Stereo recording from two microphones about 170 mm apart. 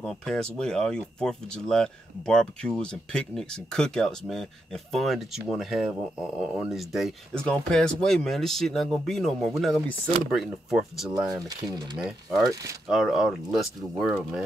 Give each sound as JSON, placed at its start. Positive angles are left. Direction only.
{"t": 0.0, "sound": "speech", "side_deg": 0}
{"t": 11.4, "sound": "speech", "side_deg": -25}
{"t": 12.8, "sound": "speech", "side_deg": -5}